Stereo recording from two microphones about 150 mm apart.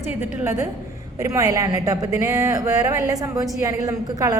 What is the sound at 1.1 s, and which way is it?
Speech, 20° right (ahead or behind).